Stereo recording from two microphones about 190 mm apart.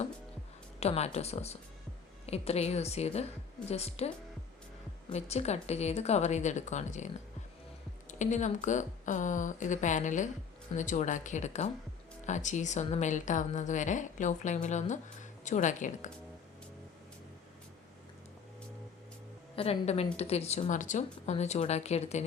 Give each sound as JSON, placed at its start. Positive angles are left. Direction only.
{"t": 0.8, "sound": "a woman's voice", "side_deg": 35}
{"t": 5.1, "sound": "a woman's voice", "side_deg": 35}
{"t": 19.5, "sound": "a woman's voice", "side_deg": 35}